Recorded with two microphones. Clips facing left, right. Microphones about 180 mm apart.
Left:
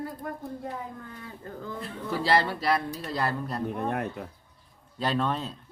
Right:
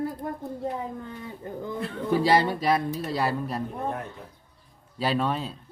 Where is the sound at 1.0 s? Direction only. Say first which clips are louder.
Right 5 dB; 20° right (ahead or behind).